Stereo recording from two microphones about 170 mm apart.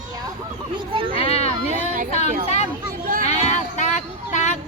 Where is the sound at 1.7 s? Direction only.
50° right (ahead or behind).